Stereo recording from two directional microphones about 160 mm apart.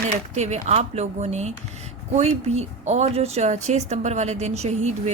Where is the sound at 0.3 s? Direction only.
45° right (ahead or behind).